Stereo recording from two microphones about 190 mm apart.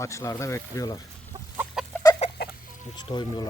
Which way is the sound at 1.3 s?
20° right (ahead or behind).